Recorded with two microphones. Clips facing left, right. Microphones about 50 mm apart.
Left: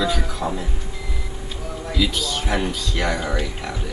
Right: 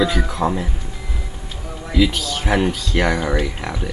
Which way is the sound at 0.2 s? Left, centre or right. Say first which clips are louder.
Right 5 dB; right.